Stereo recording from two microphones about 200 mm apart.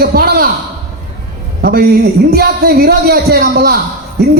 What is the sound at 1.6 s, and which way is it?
A man's voice, 50° right (ahead or behind).